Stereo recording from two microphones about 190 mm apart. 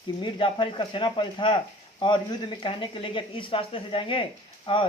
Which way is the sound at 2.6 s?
25° left (ahead or behind).